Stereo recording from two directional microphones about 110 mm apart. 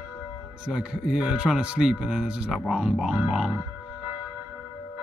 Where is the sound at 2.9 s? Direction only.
5° right (ahead or behind).